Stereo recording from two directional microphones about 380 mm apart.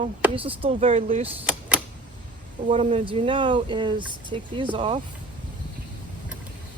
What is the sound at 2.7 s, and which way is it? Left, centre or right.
Speech, centre.